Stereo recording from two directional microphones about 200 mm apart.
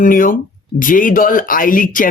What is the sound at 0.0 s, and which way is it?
Speech, 45° left (ahead or behind).